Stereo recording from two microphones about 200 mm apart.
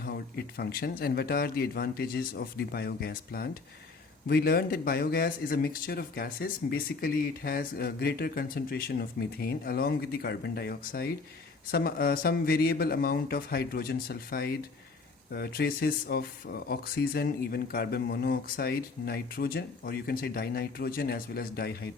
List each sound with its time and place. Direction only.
0.0 s speech: 50° left (ahead or behind)